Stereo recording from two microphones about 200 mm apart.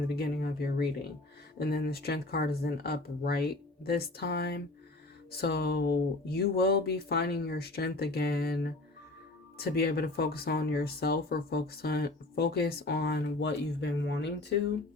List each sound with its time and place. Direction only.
0.2 s speech: 50° left (ahead or behind)